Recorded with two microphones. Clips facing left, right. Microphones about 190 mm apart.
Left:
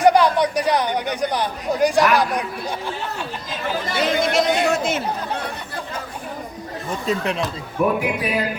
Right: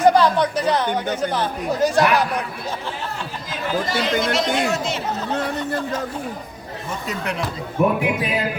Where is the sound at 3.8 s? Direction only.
55° left (ahead or behind).